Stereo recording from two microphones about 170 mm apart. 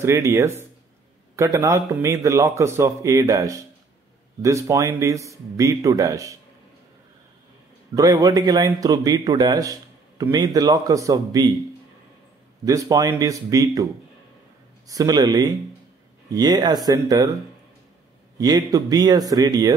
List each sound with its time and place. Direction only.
0.0 s a man's voice: 20° right (ahead or behind)
7.9 s a man's voice: 20° right (ahead or behind)
12.6 s a man's voice: 20° right (ahead or behind)
14.9 s a man's voice: 20° right (ahead or behind)
18.4 s a man's voice: 20° right (ahead or behind)